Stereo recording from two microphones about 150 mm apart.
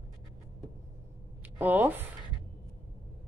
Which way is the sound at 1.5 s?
10° right (ahead or behind).